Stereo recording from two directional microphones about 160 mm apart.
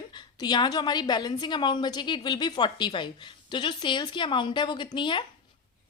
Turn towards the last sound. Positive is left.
turn(degrees=30)  # may be behind; listen again after turning